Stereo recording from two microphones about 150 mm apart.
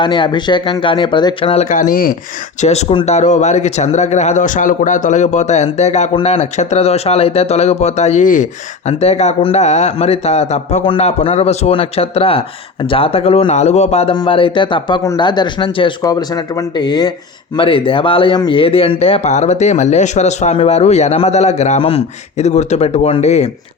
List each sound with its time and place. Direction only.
0.0 s speech: 30° left (ahead or behind)
1.7 s speech: 60° left (ahead or behind)
2.6 s speech: 50° left (ahead or behind)
8.9 s speech: 45° left (ahead or behind)